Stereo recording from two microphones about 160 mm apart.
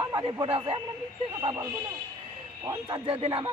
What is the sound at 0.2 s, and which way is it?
Speech, 35° right (ahead or behind).